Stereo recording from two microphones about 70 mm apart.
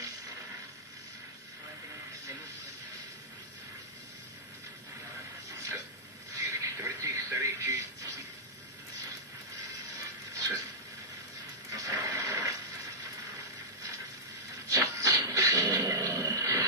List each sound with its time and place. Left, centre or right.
6.3 s television: right
10.3 s a sound: right
11.7 s television: right
14.7 s dog: right